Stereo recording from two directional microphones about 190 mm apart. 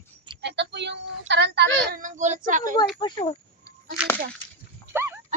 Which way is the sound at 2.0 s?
40° right (ahead or behind).